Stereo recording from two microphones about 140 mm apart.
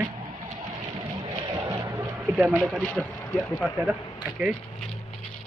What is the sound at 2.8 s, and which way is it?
Speech, 5° left (ahead or behind).